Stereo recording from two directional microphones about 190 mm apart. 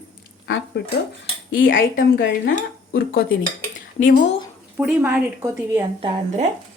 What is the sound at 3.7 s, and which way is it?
Dishes, 45° left (ahead or behind).